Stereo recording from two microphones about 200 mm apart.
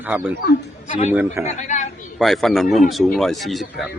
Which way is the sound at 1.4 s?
35° left (ahead or behind).